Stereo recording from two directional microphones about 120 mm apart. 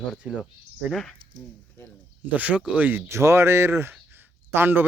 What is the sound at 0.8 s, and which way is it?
Speech, centre (ahead or behind).